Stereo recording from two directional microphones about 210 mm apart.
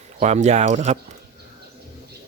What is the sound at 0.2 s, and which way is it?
Speech, 35° right (ahead or behind).